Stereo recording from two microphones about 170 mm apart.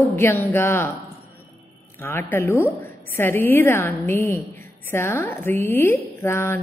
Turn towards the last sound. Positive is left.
turn(degrees=15)  # may be behind; listen again after turning